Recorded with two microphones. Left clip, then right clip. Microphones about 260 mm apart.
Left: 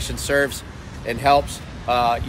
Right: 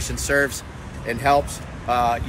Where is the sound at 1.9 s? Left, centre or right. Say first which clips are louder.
Left 1 dB; centre.